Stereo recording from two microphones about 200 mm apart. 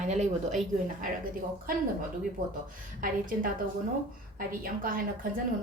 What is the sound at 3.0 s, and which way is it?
A woman's voice, 45° right (ahead or behind).